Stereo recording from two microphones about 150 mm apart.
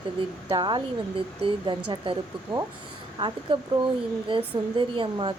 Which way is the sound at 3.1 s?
35° right (ahead or behind).